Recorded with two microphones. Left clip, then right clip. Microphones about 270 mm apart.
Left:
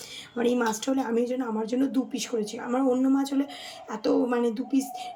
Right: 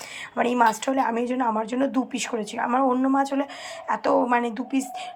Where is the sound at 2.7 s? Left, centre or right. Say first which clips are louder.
Right 3 dB; centre.